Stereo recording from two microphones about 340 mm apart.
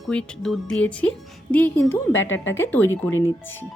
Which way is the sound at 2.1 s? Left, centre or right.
Left.